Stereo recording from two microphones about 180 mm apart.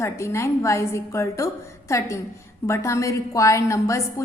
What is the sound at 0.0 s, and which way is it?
A woman's voice, 15° left (ahead or behind).